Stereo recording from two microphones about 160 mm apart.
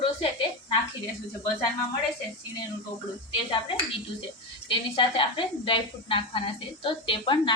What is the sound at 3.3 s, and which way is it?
A woman's voice, 30° left (ahead or behind).